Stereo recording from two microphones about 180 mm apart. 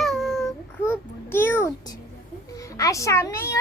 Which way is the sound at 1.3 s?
15° left (ahead or behind).